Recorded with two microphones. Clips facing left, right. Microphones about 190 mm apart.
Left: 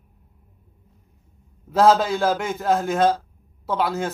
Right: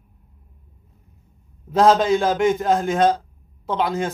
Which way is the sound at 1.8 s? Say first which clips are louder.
Right 1 dB; 5° left (ahead or behind).